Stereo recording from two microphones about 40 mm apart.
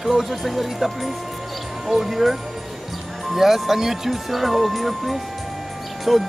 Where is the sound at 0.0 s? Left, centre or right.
Centre.